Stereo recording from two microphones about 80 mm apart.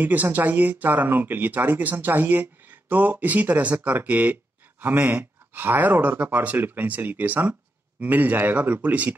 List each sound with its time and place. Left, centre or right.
0.0 s speech: right